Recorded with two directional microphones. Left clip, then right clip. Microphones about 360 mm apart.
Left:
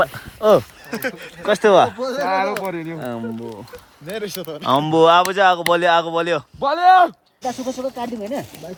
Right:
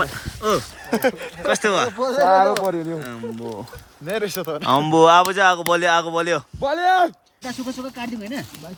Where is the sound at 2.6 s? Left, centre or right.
Centre.